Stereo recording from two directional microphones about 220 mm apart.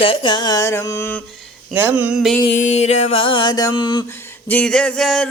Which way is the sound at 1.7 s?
10° right (ahead or behind).